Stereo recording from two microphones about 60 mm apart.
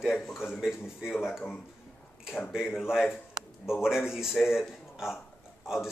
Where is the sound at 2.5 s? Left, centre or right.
Centre.